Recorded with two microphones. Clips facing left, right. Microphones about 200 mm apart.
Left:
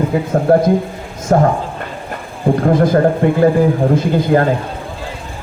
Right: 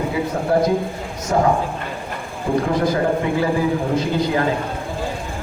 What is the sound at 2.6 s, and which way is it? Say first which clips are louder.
A man's voice: left 9 dB; 50° left (ahead or behind).